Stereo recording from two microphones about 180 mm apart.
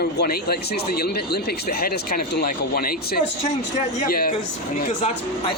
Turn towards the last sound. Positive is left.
turn(degrees=55)  # may be behind; listen again after turning